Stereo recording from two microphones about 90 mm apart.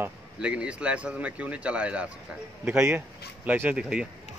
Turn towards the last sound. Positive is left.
turn(degrees=-10)  # may be behind; listen again after turning